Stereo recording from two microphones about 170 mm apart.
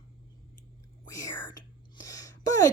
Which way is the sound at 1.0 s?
20° left (ahead or behind).